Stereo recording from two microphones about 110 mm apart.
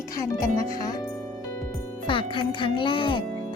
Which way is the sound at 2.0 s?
50° left (ahead or behind).